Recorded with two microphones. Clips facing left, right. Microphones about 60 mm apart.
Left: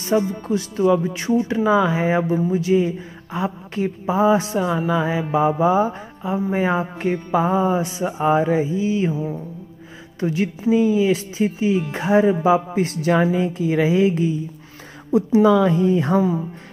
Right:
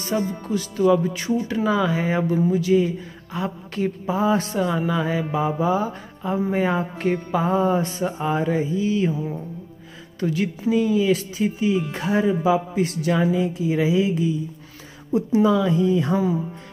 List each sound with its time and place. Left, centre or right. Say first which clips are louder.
0.0 s speech: left 4 dB; left; by 8.1 s centre
8.2 s speech: left 6 dB; left
10.2 s speech: left 2 dB; left
13.3 s a woman's voice: left 2 dB; left
15.1 s a woman's voice: left 4 dB; left